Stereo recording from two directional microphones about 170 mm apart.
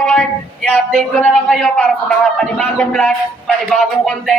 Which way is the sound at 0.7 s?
5° left (ahead or behind).